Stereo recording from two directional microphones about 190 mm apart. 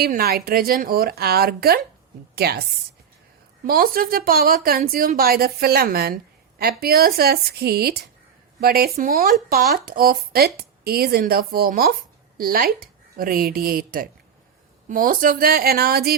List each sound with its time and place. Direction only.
0.0 s a woman's voice: 55° right (ahead or behind)
3.7 s speech: 50° right (ahead or behind)